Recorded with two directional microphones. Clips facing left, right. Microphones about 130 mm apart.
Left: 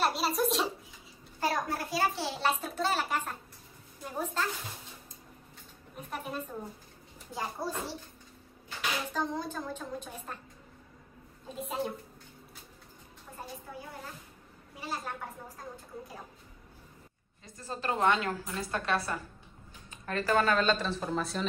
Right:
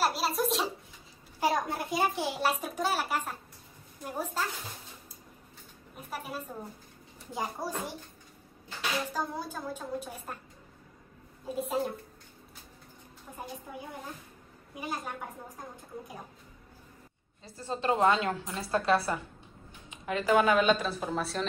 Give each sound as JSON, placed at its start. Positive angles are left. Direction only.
{"t": 0.0, "sound": "a sound", "side_deg": 0}
{"t": 1.4, "sound": "a child's voice", "side_deg": -20}
{"t": 6.0, "sound": "a child's voice", "side_deg": -5}
{"t": 9.1, "sound": "a child's voice", "side_deg": -10}
{"t": 11.4, "sound": "a woman's voice", "side_deg": 0}
{"t": 14.8, "sound": "a woman's voice", "side_deg": -15}
{"t": 17.5, "sound": "a woman's voice", "side_deg": -30}
{"t": 19.9, "sound": "a child's voice", "side_deg": -15}